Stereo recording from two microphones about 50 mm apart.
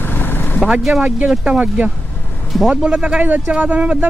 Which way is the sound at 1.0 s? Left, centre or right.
Right.